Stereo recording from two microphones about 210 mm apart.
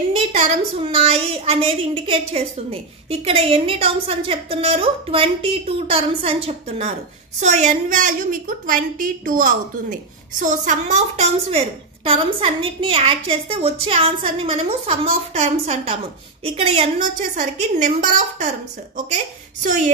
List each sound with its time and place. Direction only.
0.1 s a woman's voice: 30° right (ahead or behind)